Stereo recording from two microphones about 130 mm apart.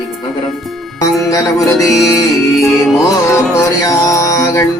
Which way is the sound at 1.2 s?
25° left (ahead or behind).